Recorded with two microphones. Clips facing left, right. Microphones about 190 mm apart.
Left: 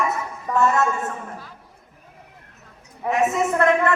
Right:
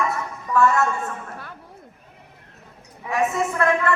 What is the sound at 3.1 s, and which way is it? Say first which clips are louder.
Speech: left 2 dB; 20° left (ahead or behind).